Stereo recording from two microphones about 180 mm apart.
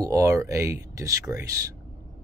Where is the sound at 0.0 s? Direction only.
15° right (ahead or behind).